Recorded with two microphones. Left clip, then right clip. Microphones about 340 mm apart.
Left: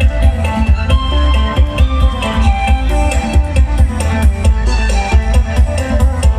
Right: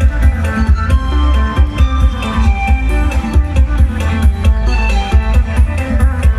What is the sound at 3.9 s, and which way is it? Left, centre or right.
Music, centre.